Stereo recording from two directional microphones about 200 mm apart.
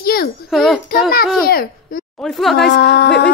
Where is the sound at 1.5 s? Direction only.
50° left (ahead or behind).